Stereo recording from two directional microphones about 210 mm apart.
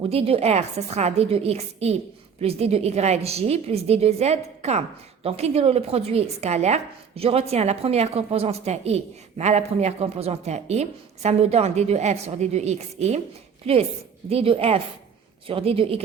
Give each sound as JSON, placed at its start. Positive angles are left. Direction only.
{"t": 0.0, "sound": "a woman's voice", "side_deg": -25}